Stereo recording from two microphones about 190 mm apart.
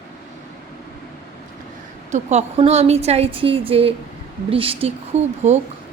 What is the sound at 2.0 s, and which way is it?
A woman's voice, 40° right (ahead or behind).